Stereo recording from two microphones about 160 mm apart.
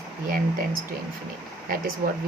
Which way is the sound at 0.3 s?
60° right (ahead or behind).